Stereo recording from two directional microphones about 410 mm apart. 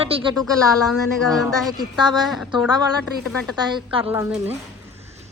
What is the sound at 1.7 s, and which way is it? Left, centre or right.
Speech, centre.